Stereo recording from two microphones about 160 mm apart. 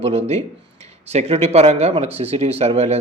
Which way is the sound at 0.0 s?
40° right (ahead or behind).